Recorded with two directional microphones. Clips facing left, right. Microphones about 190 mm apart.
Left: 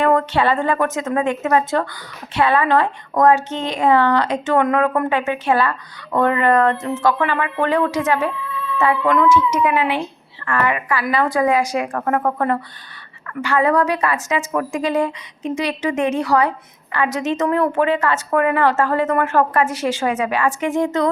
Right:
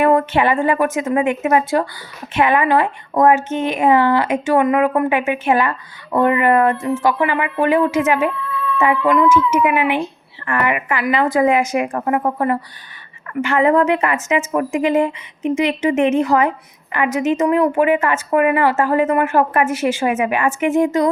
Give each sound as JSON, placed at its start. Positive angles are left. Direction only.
{"t": 0.0, "sound": "speech", "side_deg": -15}
{"t": 9.7, "sound": "speech", "side_deg": -15}